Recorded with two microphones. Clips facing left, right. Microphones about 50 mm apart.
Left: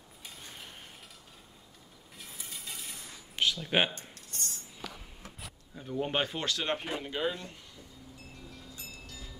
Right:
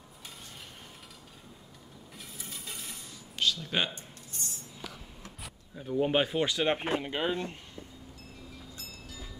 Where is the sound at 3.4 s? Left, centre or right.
Left.